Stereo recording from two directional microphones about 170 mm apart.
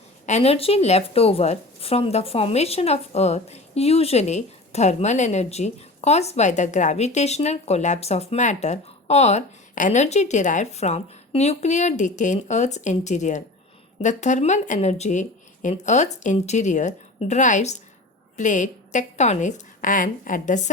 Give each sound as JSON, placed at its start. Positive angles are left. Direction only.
{"t": 0.3, "sound": "speech", "side_deg": 40}